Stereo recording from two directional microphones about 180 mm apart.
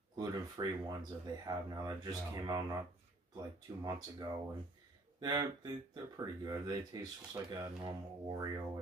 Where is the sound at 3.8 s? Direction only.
20° right (ahead or behind).